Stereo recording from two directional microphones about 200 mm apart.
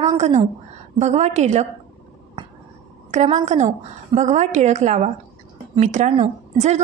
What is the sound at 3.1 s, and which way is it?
A woman's voice, 35° right (ahead or behind).